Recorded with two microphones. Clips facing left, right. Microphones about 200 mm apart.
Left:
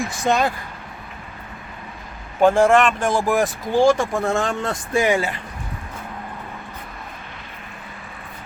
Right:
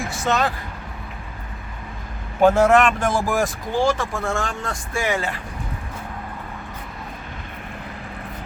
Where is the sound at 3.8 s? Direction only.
10° left (ahead or behind).